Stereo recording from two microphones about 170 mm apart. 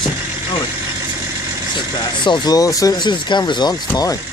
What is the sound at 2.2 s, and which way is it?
Speech, 25° left (ahead or behind).